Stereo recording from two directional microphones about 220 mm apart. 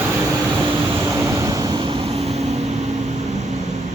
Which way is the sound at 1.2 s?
15° right (ahead or behind).